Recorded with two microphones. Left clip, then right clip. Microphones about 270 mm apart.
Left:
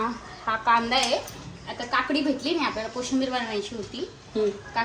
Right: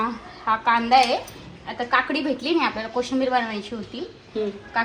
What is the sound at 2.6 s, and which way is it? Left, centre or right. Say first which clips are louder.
Speech: right 4 dB; centre.